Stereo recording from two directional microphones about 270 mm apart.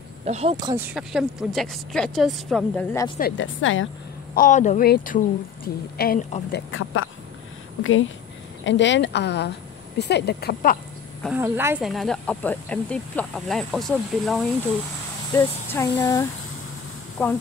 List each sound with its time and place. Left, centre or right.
0.2 s speech: right; by 3.1 s centre
3.2 s a woman's voice: left
4.4 s a woman's voice: left
6.7 s a woman's voice: left
11.2 s speech: centre